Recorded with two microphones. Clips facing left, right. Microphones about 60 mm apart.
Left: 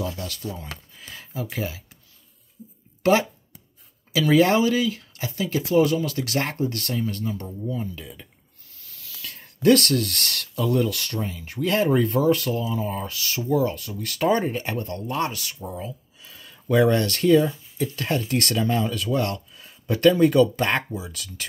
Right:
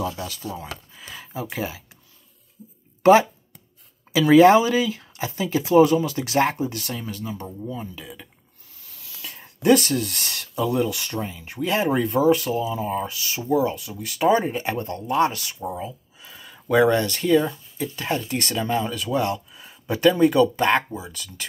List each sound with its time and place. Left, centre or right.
0.2 s speech: centre
3.0 s speech: right; by 8.3 s centre
9.2 s speech: right
14.6 s speech: right
17.3 s speech: centre